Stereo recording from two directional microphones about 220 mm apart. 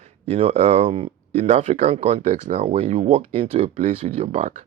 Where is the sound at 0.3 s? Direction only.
30° right (ahead or behind).